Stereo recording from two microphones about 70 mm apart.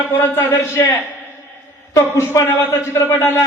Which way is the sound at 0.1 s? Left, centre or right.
Left.